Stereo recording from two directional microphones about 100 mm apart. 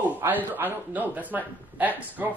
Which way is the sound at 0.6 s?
20° right (ahead or behind).